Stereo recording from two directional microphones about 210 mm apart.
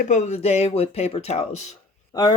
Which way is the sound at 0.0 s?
35° left (ahead or behind).